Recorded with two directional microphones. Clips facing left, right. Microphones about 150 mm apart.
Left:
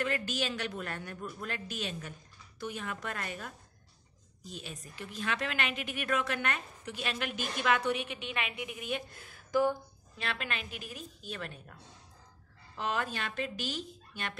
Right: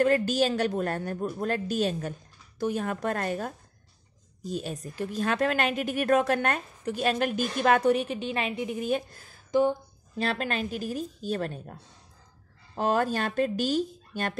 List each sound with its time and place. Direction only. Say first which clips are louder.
0.0 s a woman's voice: right 11 dB; 40° right (ahead or behind)
9.5 s speech: right 5 dB; 25° right (ahead or behind)
10.1 s a woman's voice: right 9 dB; 40° right (ahead or behind)